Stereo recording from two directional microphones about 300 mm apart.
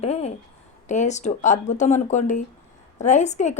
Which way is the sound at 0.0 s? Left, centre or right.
Left.